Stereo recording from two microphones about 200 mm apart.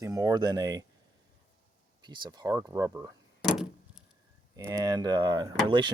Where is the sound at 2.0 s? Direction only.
20° right (ahead or behind).